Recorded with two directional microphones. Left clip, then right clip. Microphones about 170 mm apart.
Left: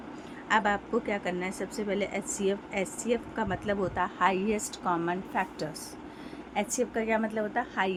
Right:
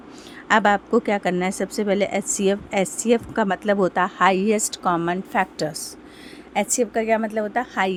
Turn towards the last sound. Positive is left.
turn(degrees=-55)  # may be behind; listen again after turning